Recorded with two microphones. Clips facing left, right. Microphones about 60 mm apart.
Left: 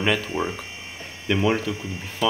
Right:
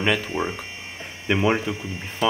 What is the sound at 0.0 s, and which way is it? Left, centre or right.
Speech, centre.